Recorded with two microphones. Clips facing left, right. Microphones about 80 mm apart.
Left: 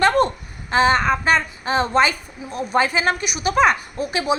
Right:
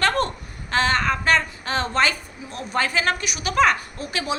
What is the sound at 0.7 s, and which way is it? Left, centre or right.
A woman's voice, centre.